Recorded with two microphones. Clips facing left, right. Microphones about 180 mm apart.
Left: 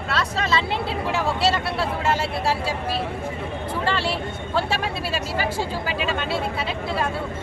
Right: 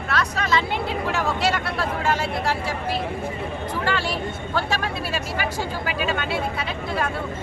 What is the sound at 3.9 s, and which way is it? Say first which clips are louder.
Speech: even; 30° left (ahead or behind).